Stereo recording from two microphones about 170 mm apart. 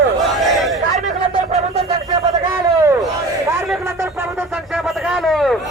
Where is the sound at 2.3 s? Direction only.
20° right (ahead or behind).